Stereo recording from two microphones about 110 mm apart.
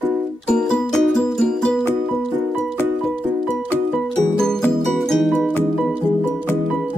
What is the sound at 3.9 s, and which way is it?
Music, 5° left (ahead or behind).